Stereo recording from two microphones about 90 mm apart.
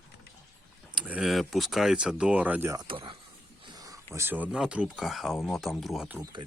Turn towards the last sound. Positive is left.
turn(degrees=0)  # may be behind; listen again after turning